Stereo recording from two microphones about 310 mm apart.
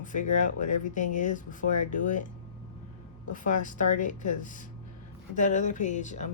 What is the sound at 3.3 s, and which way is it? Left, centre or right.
Speech, left.